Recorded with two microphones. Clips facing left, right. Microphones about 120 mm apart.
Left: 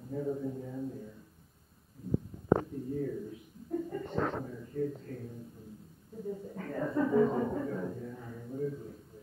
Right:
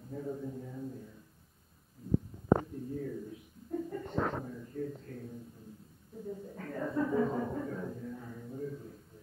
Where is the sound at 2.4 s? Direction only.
Centre (ahead or behind).